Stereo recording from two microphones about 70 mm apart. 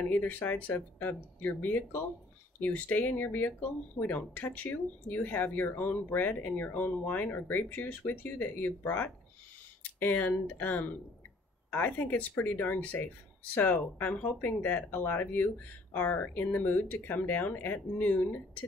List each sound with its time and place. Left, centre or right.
0.0 s speech: left